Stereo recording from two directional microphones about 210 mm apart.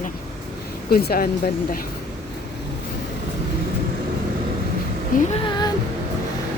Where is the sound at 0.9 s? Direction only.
45° left (ahead or behind).